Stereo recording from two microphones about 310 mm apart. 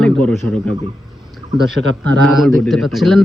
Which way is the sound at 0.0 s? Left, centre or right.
Centre.